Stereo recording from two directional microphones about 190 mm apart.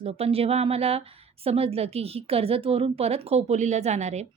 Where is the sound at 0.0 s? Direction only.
30° right (ahead or behind).